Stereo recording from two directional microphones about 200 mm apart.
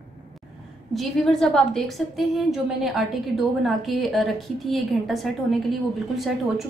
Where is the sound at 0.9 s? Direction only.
Centre (ahead or behind).